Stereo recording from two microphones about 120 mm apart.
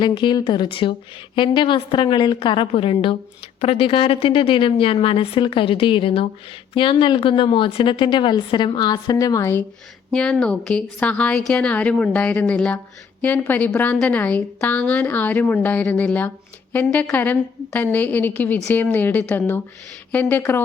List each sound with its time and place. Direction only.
0.0 s speech: 40° left (ahead or behind); by 9.6 s 20° left (ahead or behind)
10.1 s a woman's voice: 5° left (ahead or behind)